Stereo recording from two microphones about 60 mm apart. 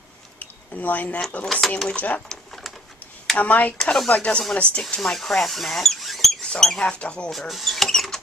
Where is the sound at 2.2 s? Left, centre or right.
Centre.